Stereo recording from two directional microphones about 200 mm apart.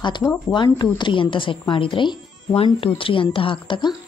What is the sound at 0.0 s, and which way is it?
A woman's voice, 20° left (ahead or behind).